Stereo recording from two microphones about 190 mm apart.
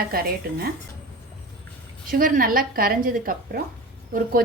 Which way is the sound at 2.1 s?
45° right (ahead or behind).